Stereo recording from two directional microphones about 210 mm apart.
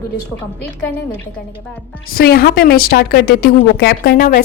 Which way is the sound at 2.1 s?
45° left (ahead or behind).